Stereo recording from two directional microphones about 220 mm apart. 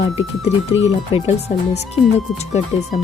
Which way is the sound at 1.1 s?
30° left (ahead or behind).